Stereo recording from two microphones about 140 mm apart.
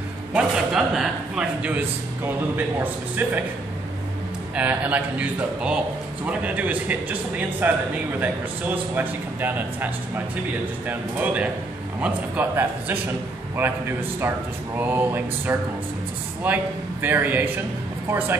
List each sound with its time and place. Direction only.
0.3 s a man's voice: 5° right (ahead or behind)
4.6 s a man's voice: 10° right (ahead or behind)